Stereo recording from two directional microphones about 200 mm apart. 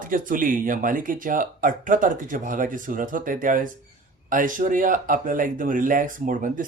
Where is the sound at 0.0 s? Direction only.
45° right (ahead or behind).